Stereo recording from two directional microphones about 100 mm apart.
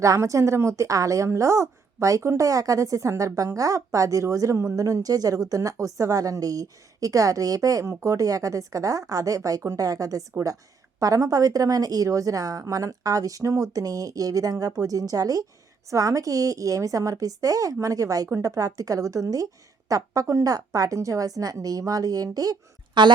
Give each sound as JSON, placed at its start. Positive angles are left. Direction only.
{"t": 0.0, "sound": "a woman's voice", "side_deg": -30}
{"t": 23.0, "sound": "a woman's voice", "side_deg": -50}